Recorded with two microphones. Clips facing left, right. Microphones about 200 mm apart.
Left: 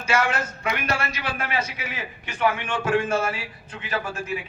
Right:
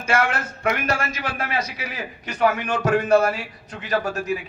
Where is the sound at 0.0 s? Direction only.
55° right (ahead or behind).